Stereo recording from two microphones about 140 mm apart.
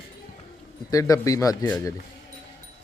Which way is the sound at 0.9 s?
25° left (ahead or behind).